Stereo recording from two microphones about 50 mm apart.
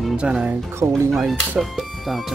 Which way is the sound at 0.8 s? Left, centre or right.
Right.